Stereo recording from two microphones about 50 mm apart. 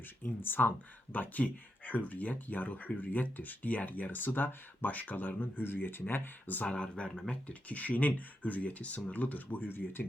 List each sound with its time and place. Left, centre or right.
0.2 s speech: left
6.6 s speech: left